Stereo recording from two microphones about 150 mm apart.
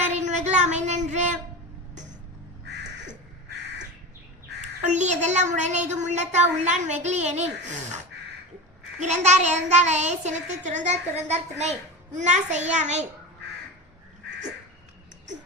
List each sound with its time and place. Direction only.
0.1 s a sound: 50° right (ahead or behind)
4.8 s speech: 50° right (ahead or behind)
9.0 s speech: 50° right (ahead or behind)